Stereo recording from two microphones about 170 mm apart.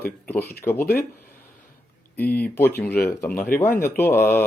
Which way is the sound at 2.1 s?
10° left (ahead or behind).